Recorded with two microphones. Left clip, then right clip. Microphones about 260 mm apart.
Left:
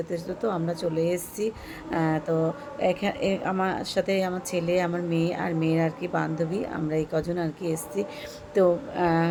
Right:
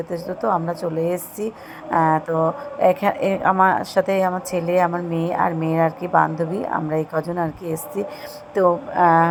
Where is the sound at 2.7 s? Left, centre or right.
Right.